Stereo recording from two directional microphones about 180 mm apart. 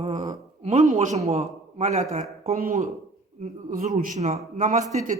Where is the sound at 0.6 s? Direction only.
40° right (ahead or behind).